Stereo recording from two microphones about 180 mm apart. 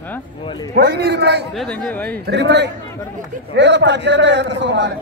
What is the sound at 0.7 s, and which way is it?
Speech, 60° right (ahead or behind).